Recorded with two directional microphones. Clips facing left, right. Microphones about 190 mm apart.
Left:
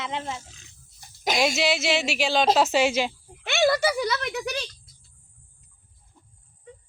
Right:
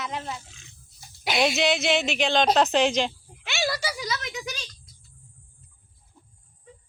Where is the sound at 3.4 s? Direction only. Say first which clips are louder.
Left 7 dB; 55° left (ahead or behind).